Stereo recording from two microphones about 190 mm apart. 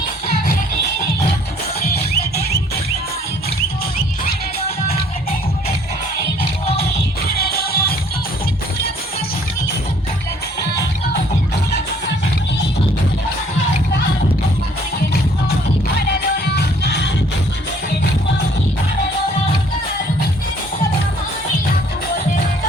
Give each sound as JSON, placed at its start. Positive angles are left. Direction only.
{"t": 1.9, "sound": "music", "side_deg": 55}
{"t": 7.3, "sound": "music", "side_deg": 55}
{"t": 16.6, "sound": "music", "side_deg": 60}